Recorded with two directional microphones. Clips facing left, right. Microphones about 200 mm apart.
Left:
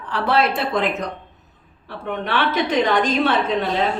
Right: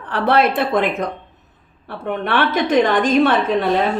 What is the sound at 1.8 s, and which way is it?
A woman's voice, 55° right (ahead or behind).